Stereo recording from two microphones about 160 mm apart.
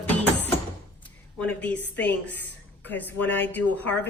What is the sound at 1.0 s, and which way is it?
Speech, 10° left (ahead or behind).